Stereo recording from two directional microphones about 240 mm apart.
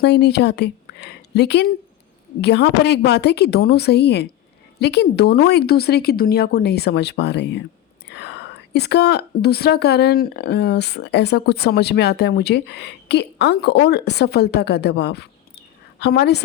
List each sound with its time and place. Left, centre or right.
0.0 s a woman's voice: left